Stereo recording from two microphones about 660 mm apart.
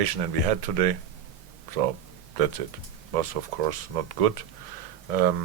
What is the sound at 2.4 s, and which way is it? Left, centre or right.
Speech, right.